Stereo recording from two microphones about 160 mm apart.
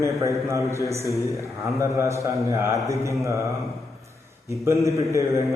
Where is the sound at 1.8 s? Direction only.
15° right (ahead or behind).